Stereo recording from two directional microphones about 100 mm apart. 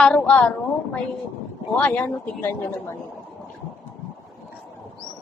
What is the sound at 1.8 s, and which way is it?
A woman's voice, 15° left (ahead or behind).